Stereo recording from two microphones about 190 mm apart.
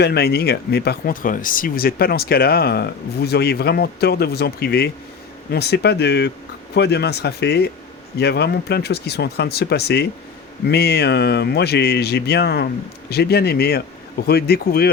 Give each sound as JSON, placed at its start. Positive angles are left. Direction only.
{"t": 0.0, "sound": "speech", "side_deg": 60}